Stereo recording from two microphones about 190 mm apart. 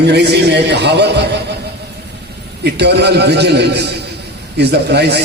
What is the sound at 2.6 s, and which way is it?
A man's voice, 60° right (ahead or behind).